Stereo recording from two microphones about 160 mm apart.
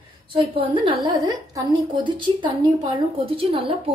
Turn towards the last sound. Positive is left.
turn(degrees=-35)  # may be behind; listen again after turning